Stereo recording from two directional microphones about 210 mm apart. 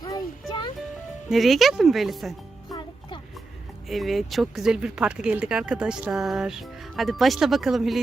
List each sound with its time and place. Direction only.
0.0 s music: 20° left (ahead or behind)
1.3 s speech: centre (ahead or behind)
3.8 s speech: centre (ahead or behind)